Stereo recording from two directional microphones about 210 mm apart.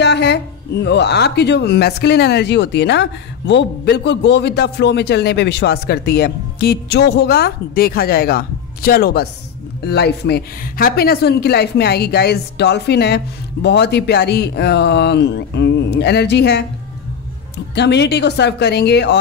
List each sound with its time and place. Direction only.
0.0 s a sound: 55° left (ahead or behind)
0.8 s speech: 55° left (ahead or behind)
17.7 s speech: 55° left (ahead or behind)